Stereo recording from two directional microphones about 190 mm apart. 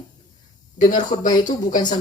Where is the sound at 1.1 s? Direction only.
25° left (ahead or behind).